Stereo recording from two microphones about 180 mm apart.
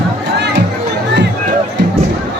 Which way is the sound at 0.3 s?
70° right (ahead or behind).